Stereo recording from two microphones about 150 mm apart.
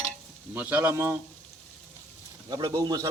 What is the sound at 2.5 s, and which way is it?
Speech, 25° right (ahead or behind).